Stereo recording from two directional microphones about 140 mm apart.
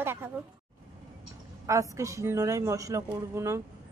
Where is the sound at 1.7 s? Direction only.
20° right (ahead or behind).